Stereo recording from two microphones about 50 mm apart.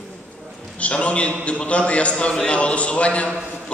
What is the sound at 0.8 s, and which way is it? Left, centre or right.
A man's voice, left.